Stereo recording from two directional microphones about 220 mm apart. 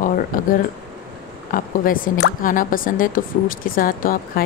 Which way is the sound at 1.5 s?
40° left (ahead or behind).